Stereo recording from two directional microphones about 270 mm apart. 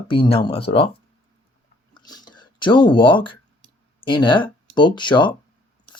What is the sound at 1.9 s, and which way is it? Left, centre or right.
Speech, centre.